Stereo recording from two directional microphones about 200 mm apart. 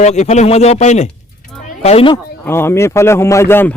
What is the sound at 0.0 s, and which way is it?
Speech, 35° left (ahead or behind).